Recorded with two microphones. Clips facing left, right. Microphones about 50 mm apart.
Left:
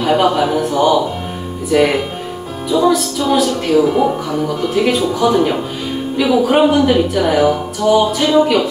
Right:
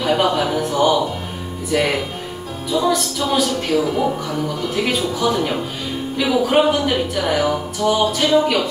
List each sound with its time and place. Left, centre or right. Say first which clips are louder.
0.0 s speech: left 4 dB; centre
3.8 s a man's voice: left 5 dB; centre